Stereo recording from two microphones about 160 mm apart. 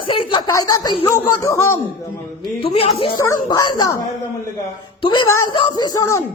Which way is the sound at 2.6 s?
35° left (ahead or behind).